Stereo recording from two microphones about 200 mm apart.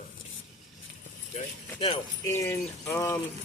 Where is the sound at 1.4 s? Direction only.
30° left (ahead or behind).